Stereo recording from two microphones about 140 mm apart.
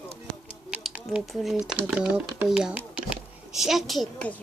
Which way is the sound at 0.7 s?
5° right (ahead or behind).